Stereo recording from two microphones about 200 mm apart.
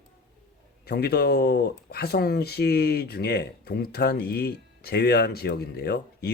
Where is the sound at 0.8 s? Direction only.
50° left (ahead or behind).